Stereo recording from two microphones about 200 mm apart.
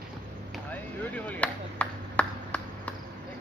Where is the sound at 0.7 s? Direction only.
10° left (ahead or behind).